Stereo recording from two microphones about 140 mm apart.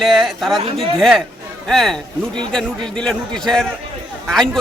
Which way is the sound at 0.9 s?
Centre (ahead or behind).